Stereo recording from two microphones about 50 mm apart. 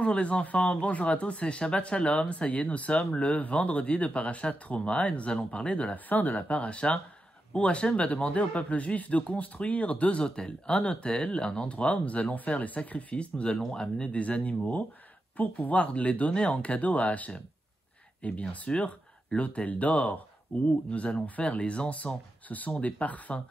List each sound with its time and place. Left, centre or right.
0.0 s speech: left
6.0 s speech: left